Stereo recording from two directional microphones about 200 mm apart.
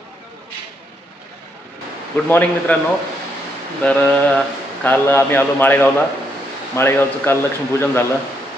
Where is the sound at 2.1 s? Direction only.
5° left (ahead or behind).